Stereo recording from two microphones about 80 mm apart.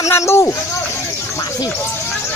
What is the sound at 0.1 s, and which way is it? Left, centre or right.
Speech, left.